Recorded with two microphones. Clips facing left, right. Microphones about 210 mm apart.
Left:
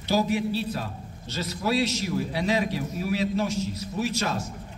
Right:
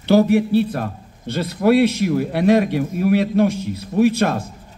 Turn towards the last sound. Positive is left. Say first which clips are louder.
# right 11 dB
turn(degrees=-55)  # may be behind; listen again after turning